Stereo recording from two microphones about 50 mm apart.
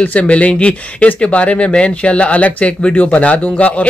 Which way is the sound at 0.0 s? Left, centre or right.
Left.